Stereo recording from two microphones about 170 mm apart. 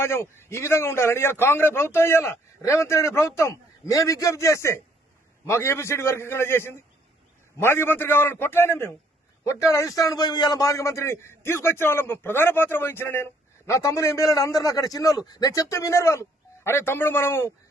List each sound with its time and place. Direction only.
0.0 s a man's voice: 15° left (ahead or behind)